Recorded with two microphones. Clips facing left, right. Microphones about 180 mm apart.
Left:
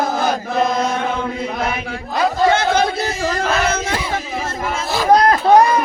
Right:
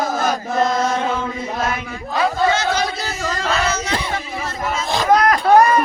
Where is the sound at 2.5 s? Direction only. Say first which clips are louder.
Left 4 dB; 55° left (ahead or behind).